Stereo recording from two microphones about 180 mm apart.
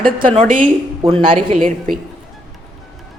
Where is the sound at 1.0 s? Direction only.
30° right (ahead or behind).